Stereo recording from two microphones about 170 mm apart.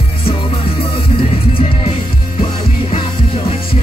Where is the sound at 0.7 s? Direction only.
30° left (ahead or behind).